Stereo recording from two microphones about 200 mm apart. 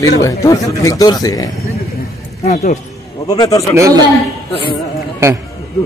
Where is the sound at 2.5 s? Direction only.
35° left (ahead or behind).